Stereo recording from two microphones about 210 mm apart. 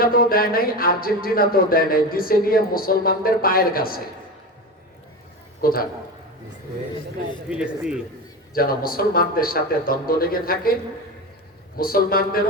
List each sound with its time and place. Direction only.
0.0 s speech: 45° left (ahead or behind)
5.6 s speech: 45° left (ahead or behind)
7.5 s speech: 5° right (ahead or behind)
8.5 s speech: 45° left (ahead or behind)
11.8 s speech: 45° left (ahead or behind)